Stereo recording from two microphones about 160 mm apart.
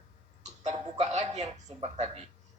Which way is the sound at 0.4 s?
45° right (ahead or behind).